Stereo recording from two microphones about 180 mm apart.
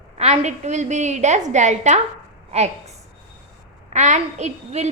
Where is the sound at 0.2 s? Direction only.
40° right (ahead or behind).